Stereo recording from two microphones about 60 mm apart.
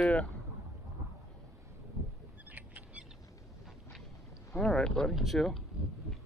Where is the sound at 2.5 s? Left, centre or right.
Right.